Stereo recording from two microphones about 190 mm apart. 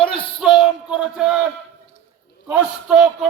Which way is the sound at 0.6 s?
5° right (ahead or behind).